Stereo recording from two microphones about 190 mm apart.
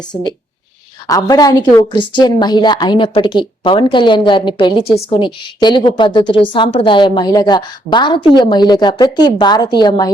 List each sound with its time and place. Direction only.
0.1 s a woman's voice: 20° left (ahead or behind)